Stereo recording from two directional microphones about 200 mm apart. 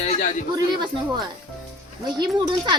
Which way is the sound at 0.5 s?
20° right (ahead or behind).